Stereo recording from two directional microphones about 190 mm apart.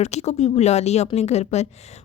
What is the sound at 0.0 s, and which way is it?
A woman's voice, 35° left (ahead or behind).